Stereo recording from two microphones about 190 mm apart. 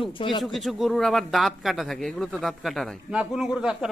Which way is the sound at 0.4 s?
Centre (ahead or behind).